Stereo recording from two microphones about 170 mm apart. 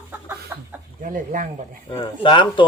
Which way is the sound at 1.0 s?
50° right (ahead or behind).